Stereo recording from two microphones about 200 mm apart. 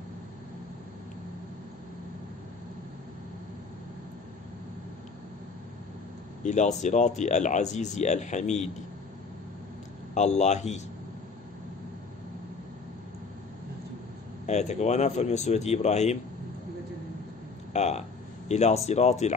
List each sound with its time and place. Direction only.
6.4 s speech: 35° left (ahead or behind)
10.1 s speech: 35° left (ahead or behind)
14.4 s speech: 35° left (ahead or behind)
17.7 s speech: 35° left (ahead or behind)